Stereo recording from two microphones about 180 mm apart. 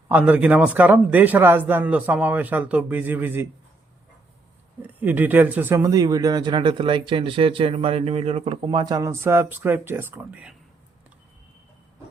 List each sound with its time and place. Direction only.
0.1 s a man's voice: 10° right (ahead or behind)
4.9 s speech: 10° right (ahead or behind)